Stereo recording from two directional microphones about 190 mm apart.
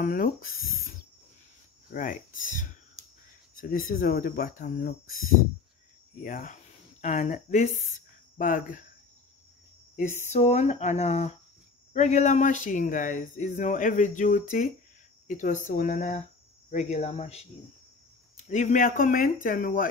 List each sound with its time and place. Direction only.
0.0 s speech: 45° left (ahead or behind)
2.0 s speech: 45° left (ahead or behind)
6.2 s speech: 45° left (ahead or behind)
9.9 s speech: 40° left (ahead or behind)